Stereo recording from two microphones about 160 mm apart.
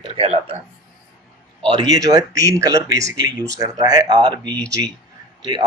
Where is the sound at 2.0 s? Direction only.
20° right (ahead or behind).